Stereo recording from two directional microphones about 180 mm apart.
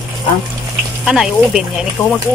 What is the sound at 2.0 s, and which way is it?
Speech, 10° left (ahead or behind).